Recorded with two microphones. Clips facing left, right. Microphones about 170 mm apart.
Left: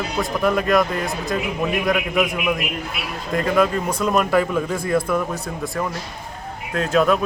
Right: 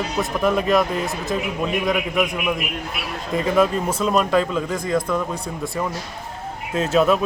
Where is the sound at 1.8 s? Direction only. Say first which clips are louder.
Left 1 dB; centre (ahead or behind).